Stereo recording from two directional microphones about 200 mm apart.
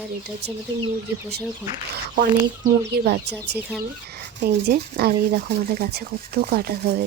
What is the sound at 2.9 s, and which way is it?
Speech, 55° right (ahead or behind).